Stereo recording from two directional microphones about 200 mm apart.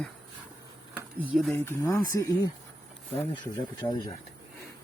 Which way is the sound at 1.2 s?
Centre (ahead or behind).